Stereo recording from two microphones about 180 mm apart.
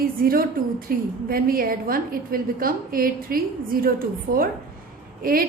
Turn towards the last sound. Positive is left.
turn(degrees=-55)  # may be behind; listen again after turning